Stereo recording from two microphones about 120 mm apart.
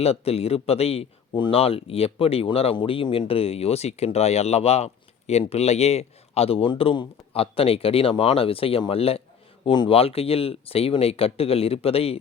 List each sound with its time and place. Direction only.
0.0 s speech: 60° left (ahead or behind)
1.3 s speech: 40° left (ahead or behind)
1.5 s speech: 55° left (ahead or behind)
9.6 s speech: 40° left (ahead or behind)